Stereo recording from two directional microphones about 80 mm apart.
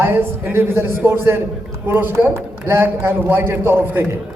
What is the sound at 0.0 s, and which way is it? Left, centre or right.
A man's voice, right.